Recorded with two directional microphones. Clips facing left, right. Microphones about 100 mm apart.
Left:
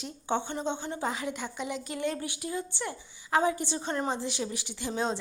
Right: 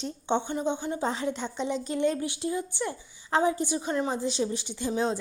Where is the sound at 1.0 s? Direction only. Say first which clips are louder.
Right 2 dB; 30° right (ahead or behind).